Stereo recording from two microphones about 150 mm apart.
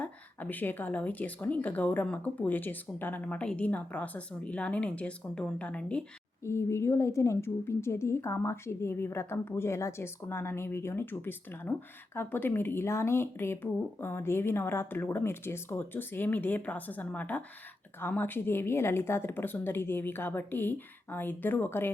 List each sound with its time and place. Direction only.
0.0 s a woman's voice: 10° left (ahead or behind)
6.4 s a woman's voice: 20° left (ahead or behind)